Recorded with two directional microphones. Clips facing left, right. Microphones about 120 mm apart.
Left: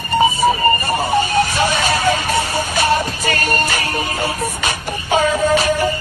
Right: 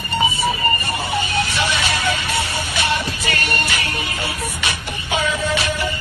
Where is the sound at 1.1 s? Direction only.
40° left (ahead or behind).